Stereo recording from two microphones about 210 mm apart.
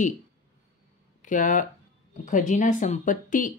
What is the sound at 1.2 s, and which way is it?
Speech, 40° left (ahead or behind).